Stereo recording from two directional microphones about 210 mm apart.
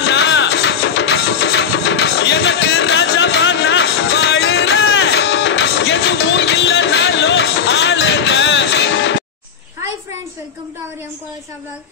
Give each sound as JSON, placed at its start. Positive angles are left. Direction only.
{"t": 0.0, "sound": "music", "side_deg": 55}